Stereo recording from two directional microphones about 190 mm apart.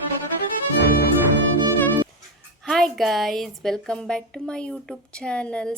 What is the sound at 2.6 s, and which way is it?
A woman's voice, centre (ahead or behind).